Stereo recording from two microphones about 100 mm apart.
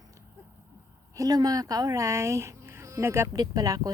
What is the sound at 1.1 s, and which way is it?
Speech, 35° right (ahead or behind).